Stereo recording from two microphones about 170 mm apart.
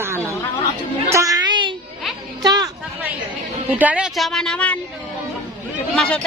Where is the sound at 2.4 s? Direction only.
20° right (ahead or behind).